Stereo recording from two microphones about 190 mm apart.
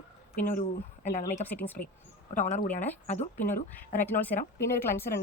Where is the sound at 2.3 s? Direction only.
40° left (ahead or behind).